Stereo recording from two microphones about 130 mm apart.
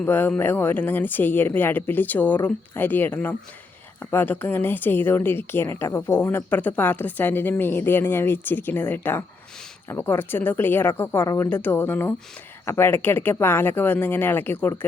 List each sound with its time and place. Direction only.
0.0 s a woman's voice: 15° left (ahead or behind)